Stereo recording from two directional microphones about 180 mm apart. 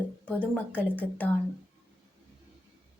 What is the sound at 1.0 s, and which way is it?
Speech, 10° left (ahead or behind).